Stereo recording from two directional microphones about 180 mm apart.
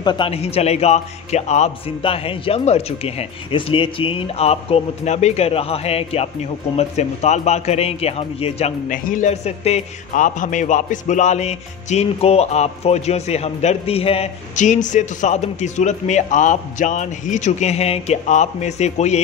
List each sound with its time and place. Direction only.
0.0 s a man's voice: 25° left (ahead or behind)